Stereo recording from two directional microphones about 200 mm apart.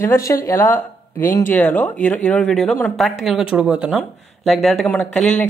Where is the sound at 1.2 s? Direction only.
40° left (ahead or behind).